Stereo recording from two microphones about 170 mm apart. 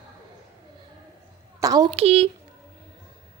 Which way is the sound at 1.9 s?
35° right (ahead or behind).